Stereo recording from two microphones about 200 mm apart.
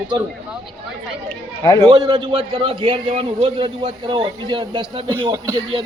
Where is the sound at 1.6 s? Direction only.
15° left (ahead or behind).